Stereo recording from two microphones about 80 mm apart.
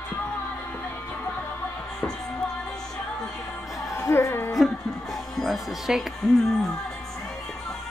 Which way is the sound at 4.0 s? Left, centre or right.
Left.